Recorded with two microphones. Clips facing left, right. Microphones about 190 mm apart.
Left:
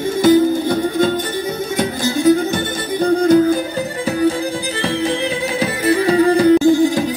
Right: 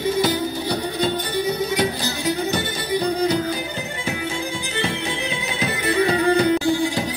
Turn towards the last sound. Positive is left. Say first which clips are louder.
# left 8 dB
turn(degrees=45)  # may be behind; listen again after turning